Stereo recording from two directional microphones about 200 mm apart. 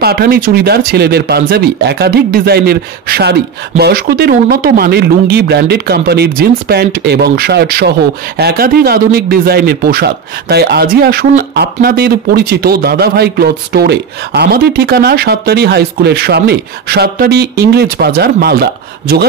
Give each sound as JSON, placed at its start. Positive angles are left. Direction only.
{"t": 0.0, "sound": "speech", "side_deg": -50}